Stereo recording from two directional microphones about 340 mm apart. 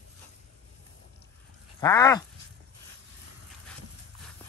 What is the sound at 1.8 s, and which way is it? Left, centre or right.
Groan, centre.